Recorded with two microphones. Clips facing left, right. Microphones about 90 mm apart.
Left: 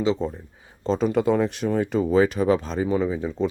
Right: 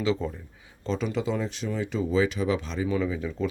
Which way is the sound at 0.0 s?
25° left (ahead or behind).